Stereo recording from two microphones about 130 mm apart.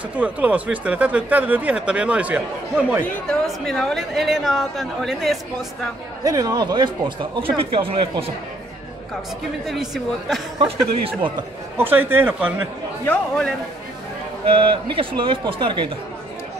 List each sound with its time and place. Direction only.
0.2 s speech: 10° right (ahead or behind)
3.3 s a woman's voice: 5° left (ahead or behind)
6.2 s speech: 30° right (ahead or behind); by 8.3 s 45° right (ahead or behind)
9.7 s a woman's voice: centre (ahead or behind)
10.6 s speech: 45° right (ahead or behind)
11.7 s speech: 15° right (ahead or behind)
13.0 s a man's voice: 10° left (ahead or behind)
14.4 s speech: 45° right (ahead or behind)